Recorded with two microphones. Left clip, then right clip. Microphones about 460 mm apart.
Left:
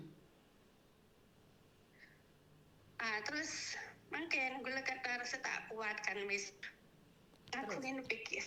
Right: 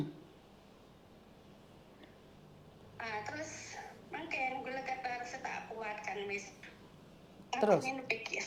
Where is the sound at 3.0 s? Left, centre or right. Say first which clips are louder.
Left 1 dB; left.